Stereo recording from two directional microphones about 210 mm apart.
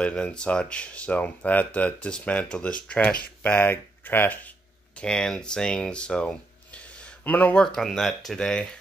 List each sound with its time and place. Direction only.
0.0 s speech: 5° left (ahead or behind)